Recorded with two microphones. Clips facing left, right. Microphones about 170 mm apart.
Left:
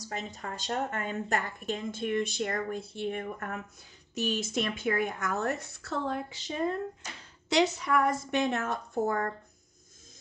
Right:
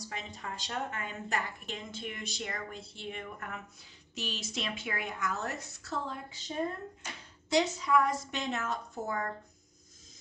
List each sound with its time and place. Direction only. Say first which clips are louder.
0.1 s a woman's voice: left 6 dB; 45° left (ahead or behind)